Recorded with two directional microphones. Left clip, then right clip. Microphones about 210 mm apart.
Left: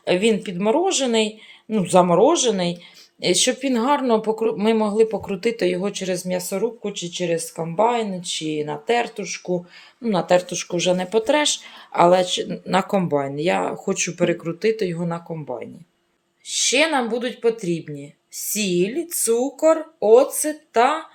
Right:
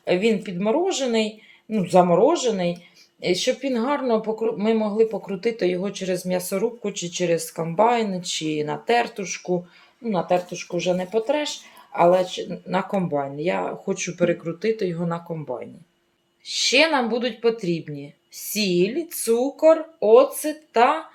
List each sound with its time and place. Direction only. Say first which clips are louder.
0.0 s speech: left 2 dB; 20° left (ahead or behind)
10.0 s speech: left 4 dB; 30° left (ahead or behind); by 21.0 s 10° left (ahead or behind)